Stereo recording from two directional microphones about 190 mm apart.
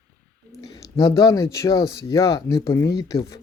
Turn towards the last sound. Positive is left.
turn(degrees=15)  # may be behind; listen again after turning